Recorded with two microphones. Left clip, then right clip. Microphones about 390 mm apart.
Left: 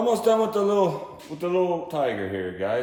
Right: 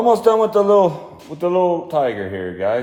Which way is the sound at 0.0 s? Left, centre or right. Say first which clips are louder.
Right 7 dB; centre.